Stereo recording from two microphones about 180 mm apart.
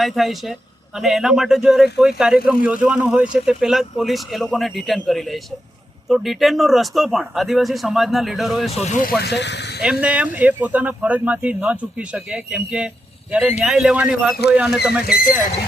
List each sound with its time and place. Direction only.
0.0 s speech: centre (ahead or behind)
8.7 s speech: 40° left (ahead or behind); by 9.8 s 70° left (ahead or behind)
9.8 s speech: 5° right (ahead or behind)
15.0 s speech: 55° left (ahead or behind)